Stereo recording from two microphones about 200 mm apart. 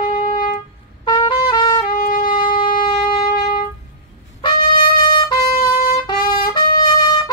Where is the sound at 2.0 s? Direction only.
45° left (ahead or behind).